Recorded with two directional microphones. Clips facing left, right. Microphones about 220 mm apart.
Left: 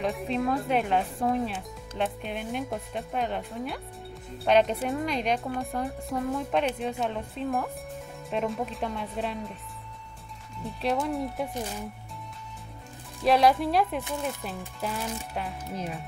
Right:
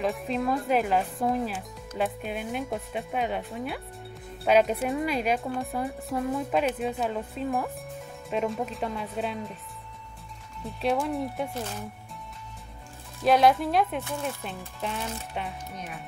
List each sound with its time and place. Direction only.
0.0 s speech: centre (ahead or behind)
10.8 s speech: centre (ahead or behind)
13.2 s speech: centre (ahead or behind)
15.7 s speech: 30° left (ahead or behind)